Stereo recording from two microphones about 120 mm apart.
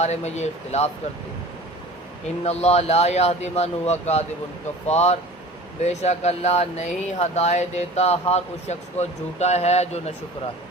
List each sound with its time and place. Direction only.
0.0 s speech: 70° left (ahead or behind)
2.4 s speech: 65° left (ahead or behind)